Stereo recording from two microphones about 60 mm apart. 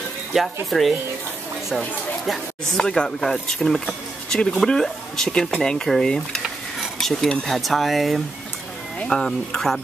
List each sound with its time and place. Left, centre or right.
0.3 s speech: centre
2.8 s speech: centre
6.8 s a sound: centre
7.4 s speech: centre